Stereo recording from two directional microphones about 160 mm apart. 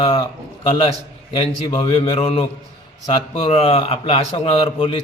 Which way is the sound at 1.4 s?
30° left (ahead or behind).